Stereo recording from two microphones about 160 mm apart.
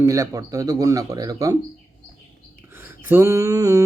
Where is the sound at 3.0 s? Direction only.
15° right (ahead or behind).